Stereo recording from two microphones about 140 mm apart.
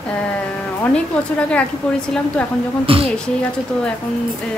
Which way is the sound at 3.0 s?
5° left (ahead or behind).